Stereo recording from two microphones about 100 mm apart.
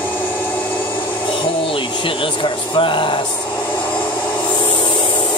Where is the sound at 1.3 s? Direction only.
60° left (ahead or behind).